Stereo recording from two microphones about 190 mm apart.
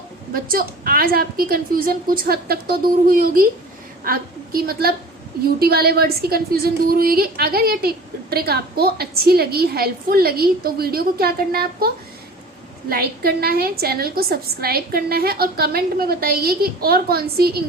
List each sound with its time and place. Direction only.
0.3 s a woman's voice: 50° right (ahead or behind)
12.9 s a woman's voice: 55° right (ahead or behind)